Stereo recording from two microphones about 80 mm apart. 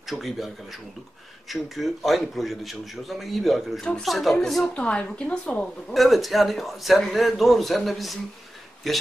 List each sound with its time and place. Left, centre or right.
0.0 s a man's voice: centre
4.7 s a woman's voice: centre
5.9 s a man's voice: centre